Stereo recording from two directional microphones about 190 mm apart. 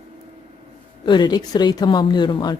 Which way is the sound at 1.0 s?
25° left (ahead or behind).